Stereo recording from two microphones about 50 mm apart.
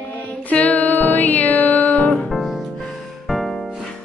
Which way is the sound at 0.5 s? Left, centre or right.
Left.